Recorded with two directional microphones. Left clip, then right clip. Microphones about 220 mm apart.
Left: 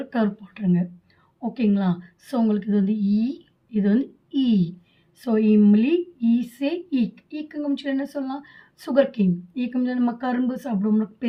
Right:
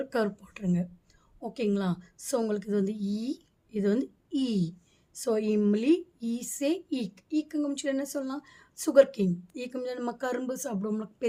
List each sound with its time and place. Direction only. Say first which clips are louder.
0.1 s a woman's voice: left 4 dB; 55° right (ahead or behind)